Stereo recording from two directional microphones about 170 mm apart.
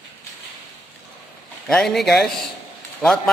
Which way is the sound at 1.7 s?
5° left (ahead or behind).